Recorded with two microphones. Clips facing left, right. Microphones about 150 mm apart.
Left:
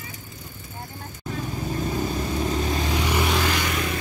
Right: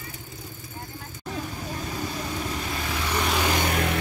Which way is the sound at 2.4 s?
30° left (ahead or behind).